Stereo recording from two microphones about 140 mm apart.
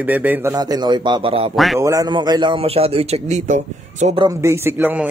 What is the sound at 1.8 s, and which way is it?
Speech, 25° right (ahead or behind).